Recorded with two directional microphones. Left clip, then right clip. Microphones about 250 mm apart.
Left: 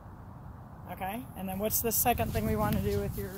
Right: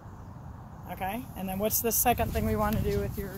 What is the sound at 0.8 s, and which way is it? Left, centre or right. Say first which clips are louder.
Speech: right 3 dB; centre.